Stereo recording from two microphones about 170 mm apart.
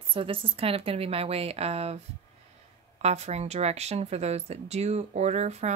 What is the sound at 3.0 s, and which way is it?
A woman's voice, 40° right (ahead or behind).